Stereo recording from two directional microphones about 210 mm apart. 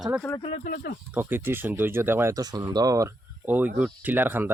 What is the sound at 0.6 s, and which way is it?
Speech, 40° left (ahead or behind).